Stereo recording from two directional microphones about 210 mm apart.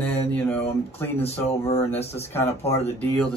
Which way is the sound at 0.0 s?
5° left (ahead or behind).